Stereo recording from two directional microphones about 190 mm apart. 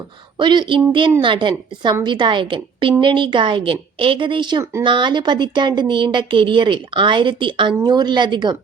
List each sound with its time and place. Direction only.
0.3 s a woman's voice: 25° right (ahead or behind)